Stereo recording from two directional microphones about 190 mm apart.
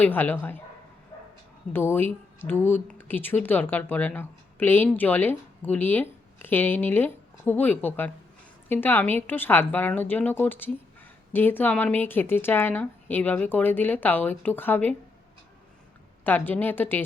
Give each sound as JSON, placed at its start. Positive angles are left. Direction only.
{"t": 0.0, "sound": "a woman's voice", "side_deg": 10}
{"t": 1.1, "sound": "bow-wow", "side_deg": 15}
{"t": 1.7, "sound": "a woman's voice", "side_deg": 10}
{"t": 16.2, "sound": "a woman's voice", "side_deg": 10}